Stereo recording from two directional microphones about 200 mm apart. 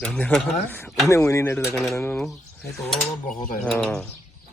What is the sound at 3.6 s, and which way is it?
Speech, centre (ahead or behind).